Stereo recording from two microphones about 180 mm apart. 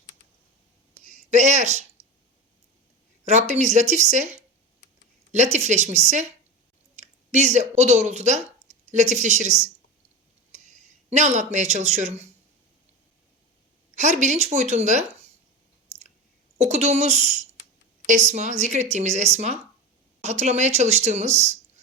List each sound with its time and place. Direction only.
0.9 s a sound: 40° right (ahead or behind)
3.2 s speech: 40° right (ahead or behind)
11.1 s speech: 40° right (ahead or behind)
13.9 s speech: 40° right (ahead or behind)
16.6 s speech: 35° right (ahead or behind)